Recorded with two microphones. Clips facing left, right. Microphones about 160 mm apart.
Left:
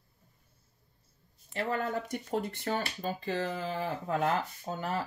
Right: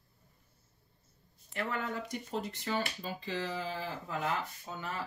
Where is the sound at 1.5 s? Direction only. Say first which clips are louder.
Left 4 dB; 35° left (ahead or behind).